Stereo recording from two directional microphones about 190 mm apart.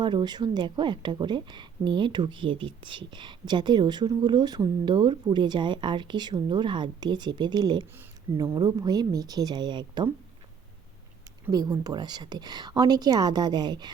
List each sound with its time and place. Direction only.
0.0 s a woman's voice: 25° right (ahead or behind)
11.4 s a woman's voice: 20° right (ahead or behind)